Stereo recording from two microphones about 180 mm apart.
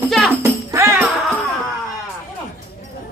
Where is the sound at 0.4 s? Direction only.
15° right (ahead or behind).